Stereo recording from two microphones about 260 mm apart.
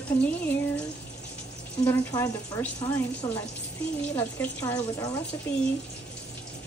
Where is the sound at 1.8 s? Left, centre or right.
Centre.